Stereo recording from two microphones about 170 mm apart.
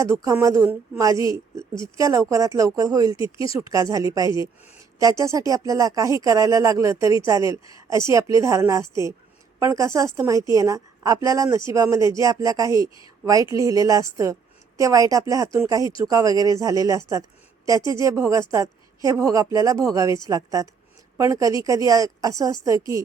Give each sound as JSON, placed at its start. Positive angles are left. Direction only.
{"t": 0.0, "sound": "a woman's voice", "side_deg": -20}